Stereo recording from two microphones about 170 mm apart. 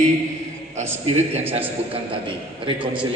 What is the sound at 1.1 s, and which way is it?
A man's voice, 40° right (ahead or behind).